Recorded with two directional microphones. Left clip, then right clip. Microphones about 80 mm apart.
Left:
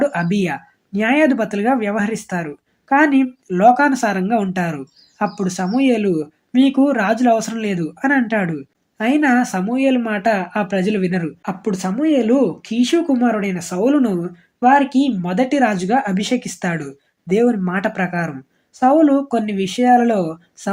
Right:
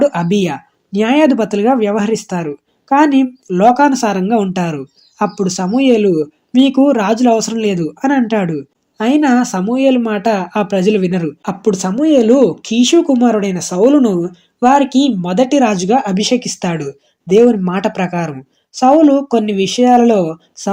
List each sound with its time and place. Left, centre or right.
0.0 s speech: right
11.4 s speech: right